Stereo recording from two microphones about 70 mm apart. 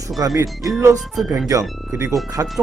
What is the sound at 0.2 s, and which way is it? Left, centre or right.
Speech, right.